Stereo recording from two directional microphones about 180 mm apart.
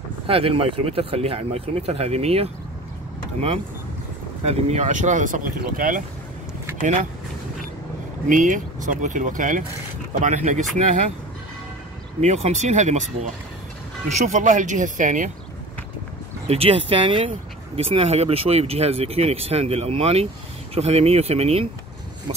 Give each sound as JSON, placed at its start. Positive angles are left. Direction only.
{"t": 0.3, "sound": "speech", "side_deg": -30}
{"t": 8.3, "sound": "speech", "side_deg": -45}
{"t": 12.2, "sound": "speech", "side_deg": -40}
{"t": 16.4, "sound": "speech", "side_deg": -35}